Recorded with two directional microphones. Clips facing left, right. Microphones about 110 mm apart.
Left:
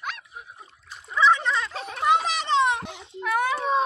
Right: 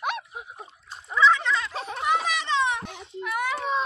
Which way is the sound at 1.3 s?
25° left (ahead or behind).